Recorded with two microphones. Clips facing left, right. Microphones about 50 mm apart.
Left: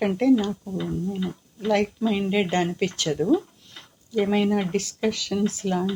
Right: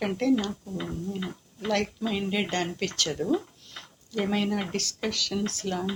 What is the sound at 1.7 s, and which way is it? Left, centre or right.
Speech, centre.